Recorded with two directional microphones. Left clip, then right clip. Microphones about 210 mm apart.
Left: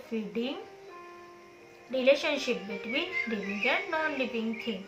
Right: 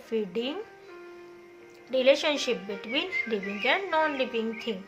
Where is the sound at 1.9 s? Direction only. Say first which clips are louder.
Right 2 dB; 50° right (ahead or behind).